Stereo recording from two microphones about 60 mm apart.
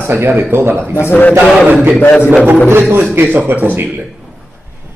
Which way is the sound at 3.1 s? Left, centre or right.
Right.